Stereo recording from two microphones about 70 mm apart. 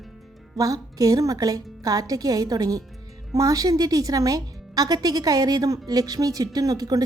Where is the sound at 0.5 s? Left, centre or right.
Right.